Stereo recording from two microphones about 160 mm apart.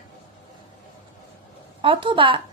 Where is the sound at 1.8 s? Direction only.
35° right (ahead or behind).